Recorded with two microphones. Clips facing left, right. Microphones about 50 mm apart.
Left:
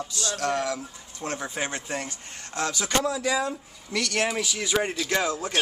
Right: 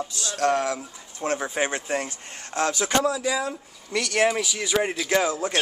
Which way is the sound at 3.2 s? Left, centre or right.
Centre.